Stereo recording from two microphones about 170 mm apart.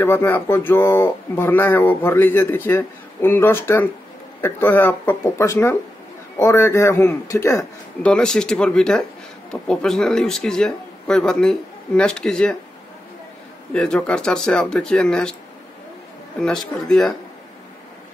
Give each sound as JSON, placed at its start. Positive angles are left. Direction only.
{"t": 0.0, "sound": "speech", "side_deg": 10}
{"t": 8.0, "sound": "speech", "side_deg": 5}
{"t": 13.7, "sound": "speech", "side_deg": 5}
{"t": 16.3, "sound": "speech", "side_deg": 5}